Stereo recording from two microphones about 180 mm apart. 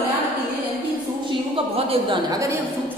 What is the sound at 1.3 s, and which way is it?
A woman's voice, 30° right (ahead or behind).